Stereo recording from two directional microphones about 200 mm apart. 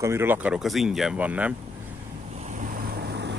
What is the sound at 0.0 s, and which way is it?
Speech, 10° right (ahead or behind).